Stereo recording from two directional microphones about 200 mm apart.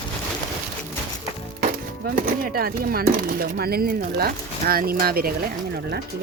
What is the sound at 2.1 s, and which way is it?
Speech, 50° right (ahead or behind).